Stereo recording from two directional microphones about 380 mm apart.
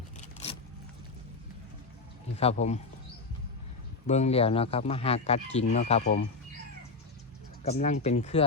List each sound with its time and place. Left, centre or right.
0.2 s vehicle: centre
2.3 s speech: centre
4.0 s speech: centre
7.6 s speech: centre